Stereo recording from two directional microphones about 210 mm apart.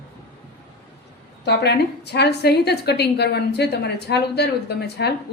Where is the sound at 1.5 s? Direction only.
55° left (ahead or behind).